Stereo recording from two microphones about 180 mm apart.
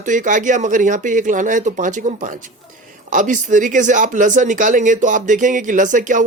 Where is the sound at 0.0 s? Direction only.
45° right (ahead or behind).